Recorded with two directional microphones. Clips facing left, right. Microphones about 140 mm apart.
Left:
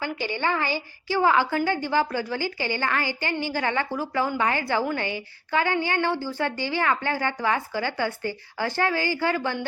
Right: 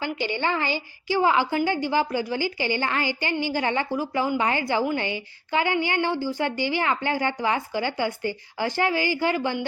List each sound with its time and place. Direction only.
0.0 s a woman's voice: 20° right (ahead or behind)